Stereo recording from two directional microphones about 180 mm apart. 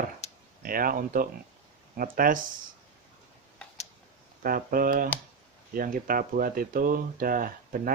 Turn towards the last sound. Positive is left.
turn(degrees=-50)  # may be behind; listen again after turning